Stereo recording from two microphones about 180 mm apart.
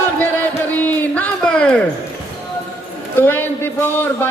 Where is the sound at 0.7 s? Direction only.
10° left (ahead or behind).